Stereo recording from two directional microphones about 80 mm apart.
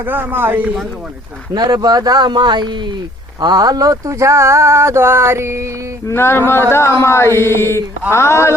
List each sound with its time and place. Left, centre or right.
0.0 s speech: right
1.5 s speech: right
3.4 s speech: right
6.1 s speech: left